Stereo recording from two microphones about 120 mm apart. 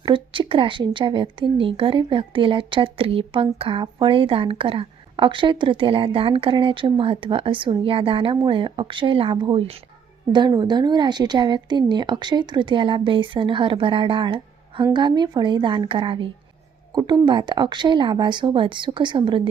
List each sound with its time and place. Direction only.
0.0 s a woman's voice: 45° right (ahead or behind)
16.9 s a woman's voice: 35° right (ahead or behind)